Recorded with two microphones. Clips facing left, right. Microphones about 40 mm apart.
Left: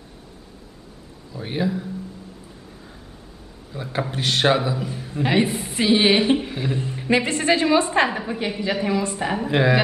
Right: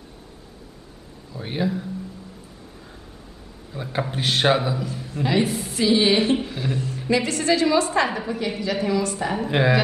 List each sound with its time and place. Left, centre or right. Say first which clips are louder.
1.3 s speech: left 1 dB; centre
3.7 s speech: even; centre
4.7 s a woman's voice: left 1 dB; centre
9.4 s speech: left 1 dB; centre